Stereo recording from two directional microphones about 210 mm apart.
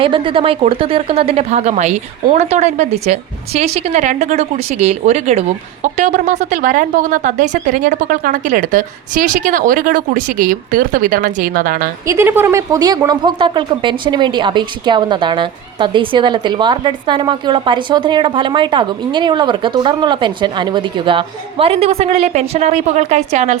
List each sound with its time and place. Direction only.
0.0 s a woman's voice: 25° right (ahead or behind); by 11.9 s 40° right (ahead or behind)
12.0 s speech: 10° right (ahead or behind); by 23.6 s 35° right (ahead or behind)